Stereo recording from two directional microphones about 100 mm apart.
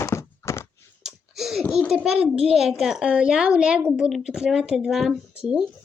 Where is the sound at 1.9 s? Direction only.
10° right (ahead or behind).